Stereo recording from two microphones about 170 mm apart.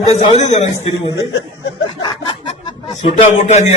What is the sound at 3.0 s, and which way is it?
Speech, 45° left (ahead or behind).